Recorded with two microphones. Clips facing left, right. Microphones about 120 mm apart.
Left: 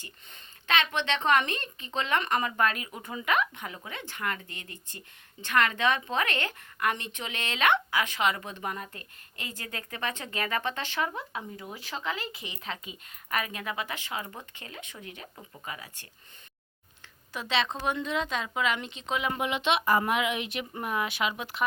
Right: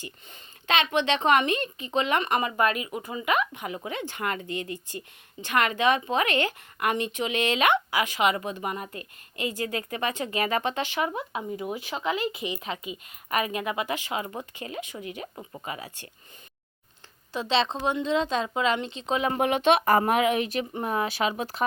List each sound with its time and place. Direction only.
0.7 s speech: 20° right (ahead or behind)
4.1 s speech: 20° right (ahead or behind)
17.3 s speech: 30° right (ahead or behind)
19.4 s speech: 50° right (ahead or behind)